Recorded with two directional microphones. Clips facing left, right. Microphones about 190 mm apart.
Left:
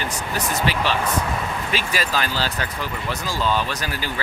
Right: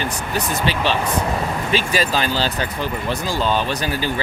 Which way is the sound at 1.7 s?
25° right (ahead or behind).